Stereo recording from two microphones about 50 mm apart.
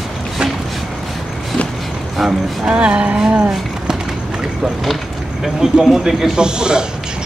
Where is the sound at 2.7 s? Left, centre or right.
Right.